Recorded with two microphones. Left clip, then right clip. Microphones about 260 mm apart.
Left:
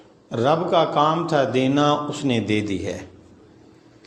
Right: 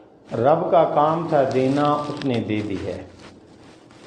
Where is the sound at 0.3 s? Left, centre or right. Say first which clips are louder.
Right 2 dB; left.